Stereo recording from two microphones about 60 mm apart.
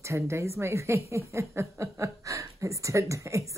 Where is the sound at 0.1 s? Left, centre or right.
Right.